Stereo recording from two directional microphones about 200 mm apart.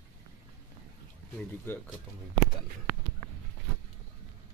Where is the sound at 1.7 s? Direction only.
10° left (ahead or behind).